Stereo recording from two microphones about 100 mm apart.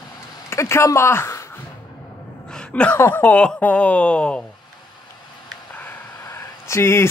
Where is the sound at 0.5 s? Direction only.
25° left (ahead or behind).